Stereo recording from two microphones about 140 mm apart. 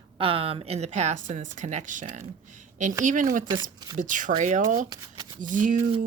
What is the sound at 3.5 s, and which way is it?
Speech, 30° right (ahead or behind).